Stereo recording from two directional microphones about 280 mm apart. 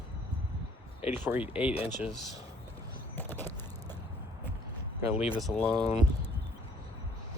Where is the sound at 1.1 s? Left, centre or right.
Centre.